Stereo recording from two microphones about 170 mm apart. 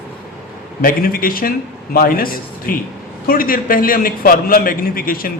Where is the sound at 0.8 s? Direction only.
60° left (ahead or behind).